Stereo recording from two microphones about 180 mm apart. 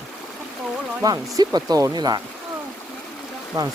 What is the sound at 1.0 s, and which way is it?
Speech, 20° right (ahead or behind).